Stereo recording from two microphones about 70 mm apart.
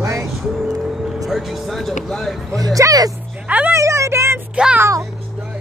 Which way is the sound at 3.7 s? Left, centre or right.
Right.